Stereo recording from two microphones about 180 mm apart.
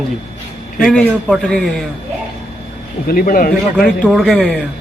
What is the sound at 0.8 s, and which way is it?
Speech, centre (ahead or behind).